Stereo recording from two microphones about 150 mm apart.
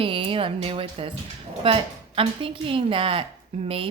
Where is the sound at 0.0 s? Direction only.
35° right (ahead or behind).